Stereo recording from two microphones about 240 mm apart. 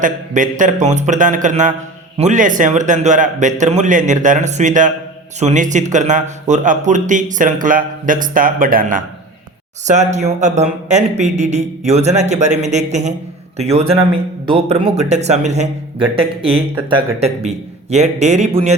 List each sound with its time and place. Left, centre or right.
0.0 s a man's voice: right